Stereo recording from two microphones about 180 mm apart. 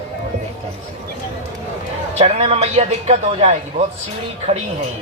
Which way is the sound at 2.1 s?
40° right (ahead or behind).